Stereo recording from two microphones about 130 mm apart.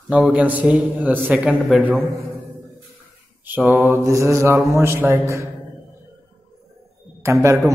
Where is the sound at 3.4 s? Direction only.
15° right (ahead or behind).